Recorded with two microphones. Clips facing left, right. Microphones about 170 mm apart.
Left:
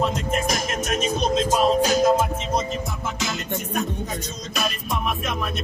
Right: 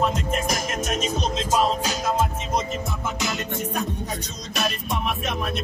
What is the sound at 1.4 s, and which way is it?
Music, 50° left (ahead or behind).